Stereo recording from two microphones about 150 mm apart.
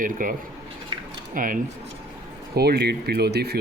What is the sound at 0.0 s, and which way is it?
Speech, 65° right (ahead or behind).